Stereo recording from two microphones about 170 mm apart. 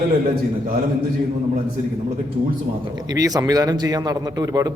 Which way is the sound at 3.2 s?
20° right (ahead or behind).